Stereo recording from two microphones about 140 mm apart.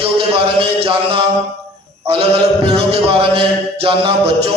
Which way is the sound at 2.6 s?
40° right (ahead or behind).